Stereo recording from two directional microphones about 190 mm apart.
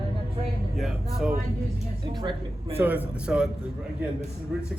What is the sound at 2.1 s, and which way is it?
Speech, 25° right (ahead or behind).